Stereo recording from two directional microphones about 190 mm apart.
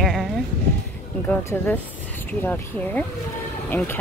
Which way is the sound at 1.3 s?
10° left (ahead or behind).